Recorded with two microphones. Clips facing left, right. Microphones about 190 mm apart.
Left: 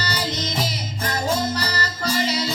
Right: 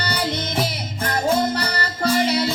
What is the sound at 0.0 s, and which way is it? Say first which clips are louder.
Music: right 2 dB; 55° right (ahead or behind).